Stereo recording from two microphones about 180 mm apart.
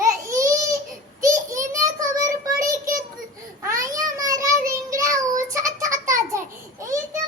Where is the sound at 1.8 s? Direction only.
20° right (ahead or behind).